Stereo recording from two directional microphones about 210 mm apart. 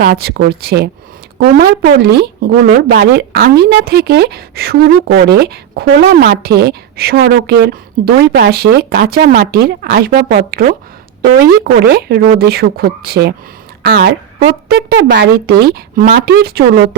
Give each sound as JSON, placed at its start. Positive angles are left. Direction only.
{"t": 0.0, "sound": "a woman's voice", "side_deg": -50}